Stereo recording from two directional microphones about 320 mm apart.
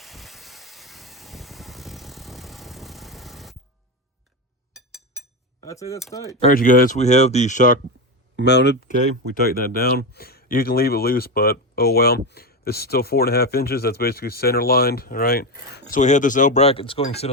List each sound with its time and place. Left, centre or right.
0.0 s vehicle: centre
4.7 s a sound: centre
5.5 s speech: centre
6.5 s speech: left